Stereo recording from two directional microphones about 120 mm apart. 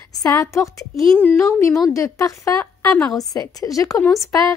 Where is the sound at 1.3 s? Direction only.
25° left (ahead or behind).